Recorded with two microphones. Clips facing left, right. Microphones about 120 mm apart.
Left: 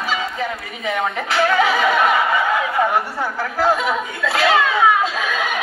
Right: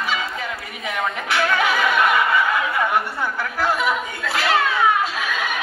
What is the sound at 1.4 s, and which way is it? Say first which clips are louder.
Snicker: left 4 dB; 30° left (ahead or behind).